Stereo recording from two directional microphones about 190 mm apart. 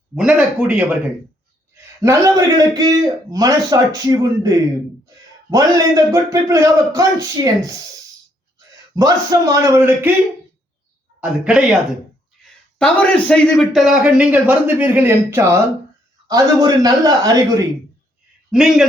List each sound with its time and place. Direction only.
0.2 s a man's voice: 5° right (ahead or behind)
2.0 s a man's voice: 15° right (ahead or behind)
11.2 s a man's voice: 5° right (ahead or behind)
12.8 s a man's voice: 5° left (ahead or behind); by 17.7 s 20° right (ahead or behind)
18.5 s a man's voice: 5° right (ahead or behind)